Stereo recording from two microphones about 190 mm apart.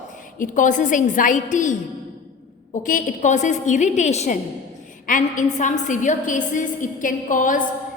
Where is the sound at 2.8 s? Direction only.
40° left (ahead or behind).